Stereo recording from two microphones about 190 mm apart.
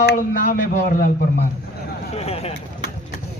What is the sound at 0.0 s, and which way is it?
A man's voice, 45° left (ahead or behind).